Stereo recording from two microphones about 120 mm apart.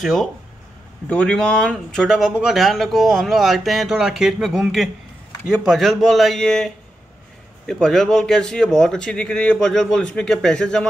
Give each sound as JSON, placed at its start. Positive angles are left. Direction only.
{"t": 0.0, "sound": "a man's voice", "side_deg": 0}